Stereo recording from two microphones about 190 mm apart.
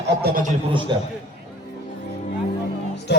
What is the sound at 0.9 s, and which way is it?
Speech, 25° right (ahead or behind).